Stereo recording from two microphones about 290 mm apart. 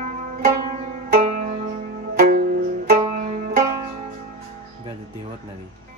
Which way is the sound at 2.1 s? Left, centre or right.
Right.